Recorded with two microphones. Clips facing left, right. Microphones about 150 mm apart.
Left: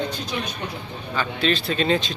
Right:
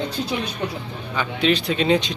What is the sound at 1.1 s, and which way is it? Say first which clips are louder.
Speech: right 2 dB; 15° right (ahead or behind).